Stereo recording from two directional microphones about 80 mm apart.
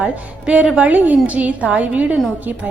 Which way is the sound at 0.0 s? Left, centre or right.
Centre.